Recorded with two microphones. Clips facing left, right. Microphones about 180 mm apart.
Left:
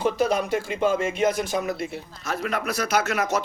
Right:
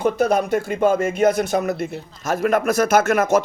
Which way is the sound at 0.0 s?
50° right (ahead or behind).